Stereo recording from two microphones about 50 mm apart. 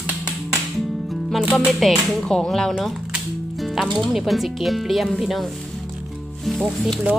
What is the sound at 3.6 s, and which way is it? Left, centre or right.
Music, centre.